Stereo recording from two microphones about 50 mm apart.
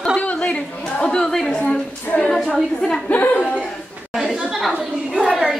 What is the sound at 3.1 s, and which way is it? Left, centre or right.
Chuckle, left.